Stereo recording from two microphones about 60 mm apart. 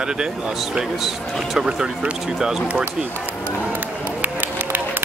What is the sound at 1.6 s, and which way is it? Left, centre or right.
Speech, centre.